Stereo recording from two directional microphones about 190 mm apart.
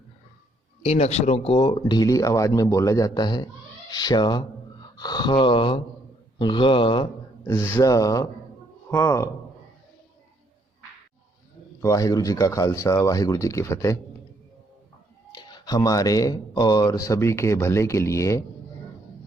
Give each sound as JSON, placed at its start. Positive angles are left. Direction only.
{"t": 0.8, "sound": "speech", "side_deg": 35}
{"t": 7.4, "sound": "speech", "side_deg": 10}
{"t": 11.8, "sound": "speech", "side_deg": 15}
{"t": 15.3, "sound": "speech", "side_deg": 20}